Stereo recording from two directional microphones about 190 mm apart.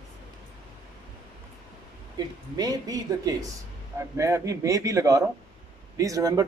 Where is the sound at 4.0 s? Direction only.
15° right (ahead or behind).